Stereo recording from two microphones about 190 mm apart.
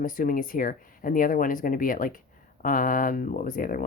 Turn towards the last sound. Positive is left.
turn(degrees=45)  # may be behind; listen again after turning